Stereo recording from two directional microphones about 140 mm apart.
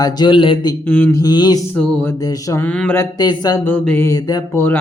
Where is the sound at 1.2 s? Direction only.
30° left (ahead or behind).